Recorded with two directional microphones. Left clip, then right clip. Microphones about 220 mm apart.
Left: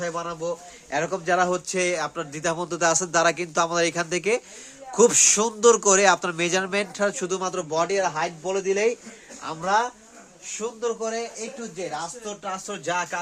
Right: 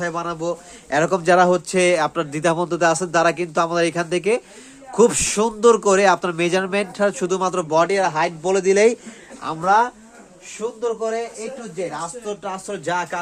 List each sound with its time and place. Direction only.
0.0 s speech: 30° right (ahead or behind)
0.9 s speech: 50° right (ahead or behind)
2.6 s a man's voice: 15° right (ahead or behind); by 9.0 s 50° right (ahead or behind)
9.4 s speech: 35° right (ahead or behind)
10.8 s speech: 10° right (ahead or behind)